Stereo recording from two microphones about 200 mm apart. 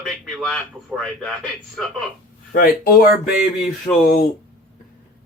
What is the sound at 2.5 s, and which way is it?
Speech, 45° left (ahead or behind).